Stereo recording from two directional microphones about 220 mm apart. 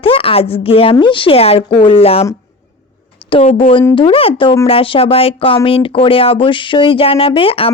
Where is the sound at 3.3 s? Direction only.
25° left (ahead or behind).